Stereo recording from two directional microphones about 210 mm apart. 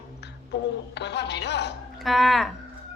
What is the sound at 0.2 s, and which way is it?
A woman's voice, 55° left (ahead or behind).